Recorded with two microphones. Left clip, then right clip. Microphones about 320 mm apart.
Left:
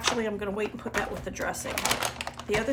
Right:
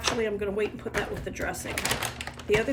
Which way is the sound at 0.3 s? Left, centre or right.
Centre.